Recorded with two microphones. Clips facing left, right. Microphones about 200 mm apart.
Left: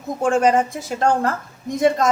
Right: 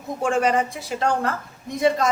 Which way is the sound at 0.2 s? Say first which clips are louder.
Left 4 dB; 45° left (ahead or behind).